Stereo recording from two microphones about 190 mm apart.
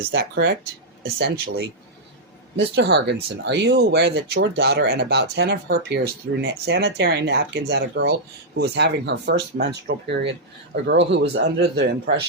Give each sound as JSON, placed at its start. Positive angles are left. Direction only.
{"t": 0.0, "sound": "speech", "side_deg": -60}
{"t": 2.7, "sound": "speech", "side_deg": -65}